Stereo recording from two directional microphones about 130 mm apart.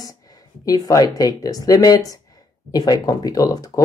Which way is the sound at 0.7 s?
25° left (ahead or behind).